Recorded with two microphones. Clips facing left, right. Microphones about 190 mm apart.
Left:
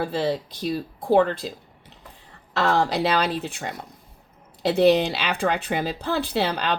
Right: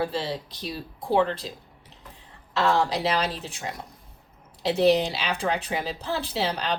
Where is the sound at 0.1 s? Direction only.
55° left (ahead or behind).